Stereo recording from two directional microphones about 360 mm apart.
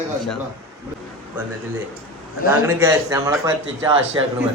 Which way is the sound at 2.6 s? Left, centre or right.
Centre.